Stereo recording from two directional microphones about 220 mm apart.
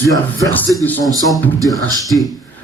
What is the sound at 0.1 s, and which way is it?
Speech, 15° left (ahead or behind).